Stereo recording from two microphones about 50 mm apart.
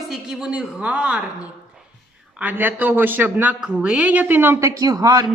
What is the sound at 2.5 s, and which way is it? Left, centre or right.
A man's voice, right.